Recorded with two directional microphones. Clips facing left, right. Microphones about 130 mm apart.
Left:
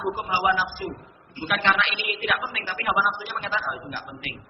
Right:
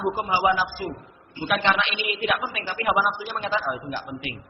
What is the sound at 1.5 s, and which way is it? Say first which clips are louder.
A woman's voice: right 1 dB; 20° right (ahead or behind).